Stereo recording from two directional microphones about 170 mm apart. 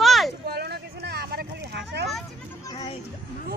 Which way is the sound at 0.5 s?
70° right (ahead or behind).